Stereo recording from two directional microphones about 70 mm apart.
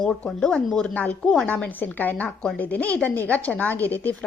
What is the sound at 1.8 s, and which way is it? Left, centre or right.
A woman's voice, left.